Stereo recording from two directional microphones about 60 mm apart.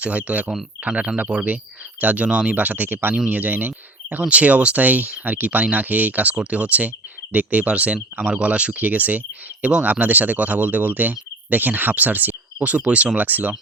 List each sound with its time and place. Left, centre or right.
0.0 s speech: right